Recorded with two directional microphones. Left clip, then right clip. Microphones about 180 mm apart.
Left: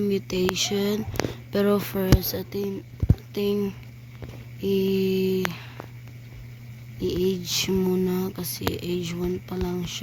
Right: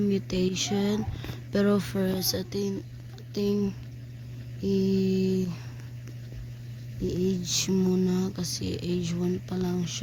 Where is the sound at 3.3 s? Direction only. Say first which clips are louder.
Left 2 dB; 5° left (ahead or behind).